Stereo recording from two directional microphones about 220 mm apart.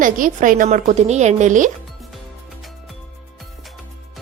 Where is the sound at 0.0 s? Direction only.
35° right (ahead or behind).